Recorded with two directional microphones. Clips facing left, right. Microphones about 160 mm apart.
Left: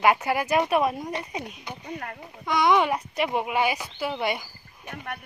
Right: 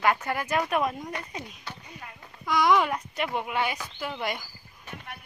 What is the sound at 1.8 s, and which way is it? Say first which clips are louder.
Speech: left 10 dB; 65° left (ahead or behind).